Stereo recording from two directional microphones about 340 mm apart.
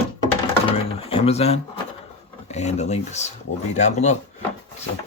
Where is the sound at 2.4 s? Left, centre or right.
Centre.